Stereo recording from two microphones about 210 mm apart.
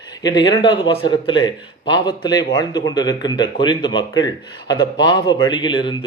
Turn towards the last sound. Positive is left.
turn(degrees=25)  # may be behind; listen again after turning